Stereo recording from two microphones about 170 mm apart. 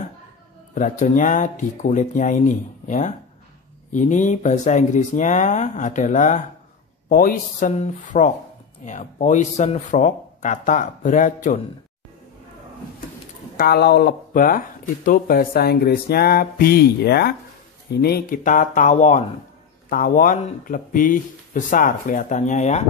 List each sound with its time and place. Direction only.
0.7 s speech: 45° left (ahead or behind)
13.6 s speech: 70° left (ahead or behind); by 19.2 s 45° left (ahead or behind)
19.9 s speech: 55° left (ahead or behind)